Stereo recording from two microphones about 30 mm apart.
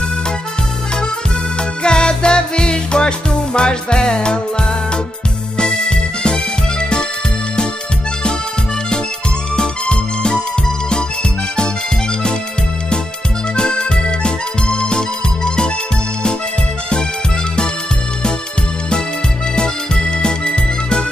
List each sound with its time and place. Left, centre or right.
1.6 s music: left
9.6 s music: left
13.6 s music: left
19.5 s music: left